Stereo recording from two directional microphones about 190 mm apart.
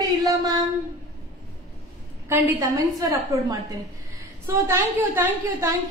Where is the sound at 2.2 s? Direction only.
10° right (ahead or behind).